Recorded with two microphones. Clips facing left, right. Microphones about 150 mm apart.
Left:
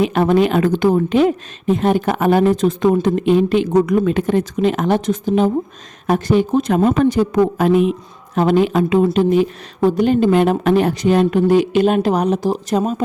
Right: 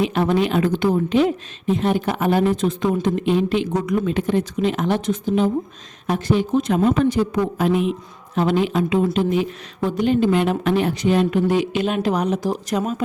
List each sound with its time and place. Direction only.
0.0 s a woman's voice: 50° left (ahead or behind); by 13.0 s 30° left (ahead or behind)